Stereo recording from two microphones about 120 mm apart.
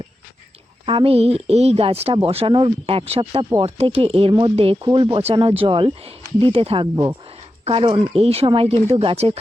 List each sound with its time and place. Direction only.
0.9 s speech: 50° right (ahead or behind)
4.9 s speech: 40° right (ahead or behind); by 9.4 s 60° right (ahead or behind)